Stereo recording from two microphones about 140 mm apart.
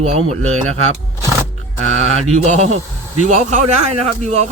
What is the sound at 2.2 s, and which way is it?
A man's voice, 50° right (ahead or behind).